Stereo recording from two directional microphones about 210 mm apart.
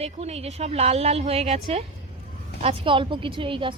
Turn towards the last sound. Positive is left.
turn(degrees=-25)  # may be behind; listen again after turning